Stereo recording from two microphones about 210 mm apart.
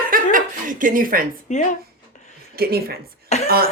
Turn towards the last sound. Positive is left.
turn(degrees=-45)  # may be behind; listen again after turning